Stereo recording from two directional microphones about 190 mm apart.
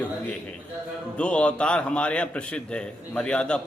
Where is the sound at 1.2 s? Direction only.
5° left (ahead or behind).